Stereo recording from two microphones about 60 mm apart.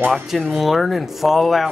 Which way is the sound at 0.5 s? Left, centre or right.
Centre.